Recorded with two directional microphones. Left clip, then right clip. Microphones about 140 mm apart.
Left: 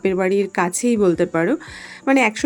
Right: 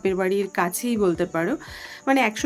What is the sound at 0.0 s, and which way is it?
Speech, 35° left (ahead or behind).